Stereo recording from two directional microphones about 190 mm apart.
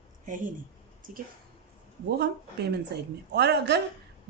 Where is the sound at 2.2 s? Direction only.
60° right (ahead or behind).